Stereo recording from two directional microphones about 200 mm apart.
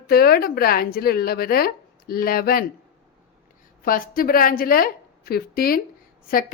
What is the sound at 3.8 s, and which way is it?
Speech, 45° left (ahead or behind).